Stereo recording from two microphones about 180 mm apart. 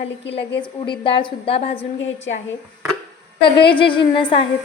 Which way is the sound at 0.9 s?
30° left (ahead or behind).